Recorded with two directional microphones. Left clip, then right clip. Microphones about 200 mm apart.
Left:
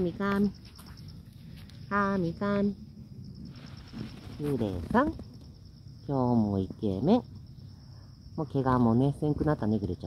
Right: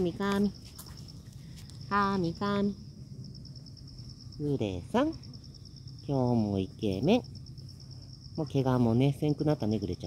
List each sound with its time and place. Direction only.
0.0 s speech: 5° right (ahead or behind)
1.9 s speech: centre (ahead or behind)
4.6 s speech: 5° left (ahead or behind)
8.4 s speech: centre (ahead or behind)